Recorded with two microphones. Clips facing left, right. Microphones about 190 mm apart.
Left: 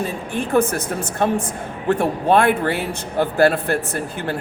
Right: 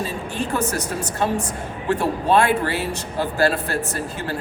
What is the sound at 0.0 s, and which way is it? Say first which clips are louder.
A woman's voice: left 2 dB; 55° left (ahead or behind).